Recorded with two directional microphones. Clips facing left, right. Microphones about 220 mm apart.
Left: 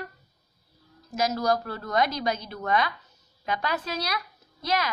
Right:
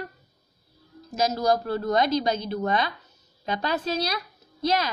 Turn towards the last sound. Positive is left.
turn(degrees=-30)  # may be behind; listen again after turning